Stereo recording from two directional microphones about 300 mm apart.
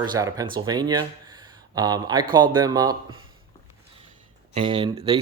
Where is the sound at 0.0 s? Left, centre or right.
Centre.